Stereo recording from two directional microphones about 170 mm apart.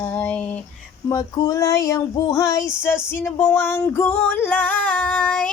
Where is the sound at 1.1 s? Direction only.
20° left (ahead or behind).